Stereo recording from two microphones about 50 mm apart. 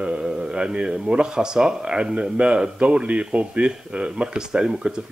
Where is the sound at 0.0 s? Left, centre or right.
Centre.